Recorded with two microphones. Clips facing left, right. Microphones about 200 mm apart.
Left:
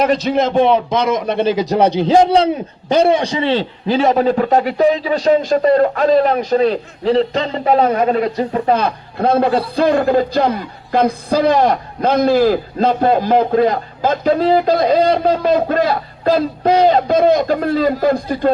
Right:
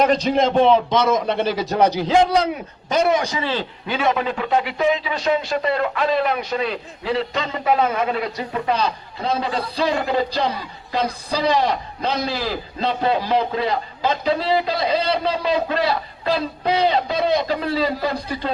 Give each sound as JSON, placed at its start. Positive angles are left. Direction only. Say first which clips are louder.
{"t": 0.0, "sound": "a man's voice", "louder": "left 2 dB", "side_deg": 5}
{"t": 8.8, "sound": "a man's voice", "louder": "left 6 dB", "side_deg": 55}